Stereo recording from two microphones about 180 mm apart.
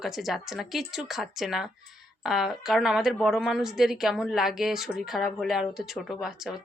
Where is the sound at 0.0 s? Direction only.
Centre (ahead or behind).